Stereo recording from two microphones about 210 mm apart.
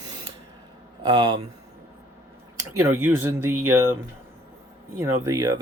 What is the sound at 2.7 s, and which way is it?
Speech, 10° right (ahead or behind).